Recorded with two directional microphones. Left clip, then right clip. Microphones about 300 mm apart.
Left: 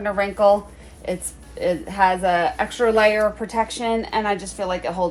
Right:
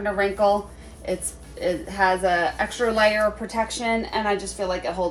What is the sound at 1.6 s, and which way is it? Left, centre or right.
A woman's voice, centre.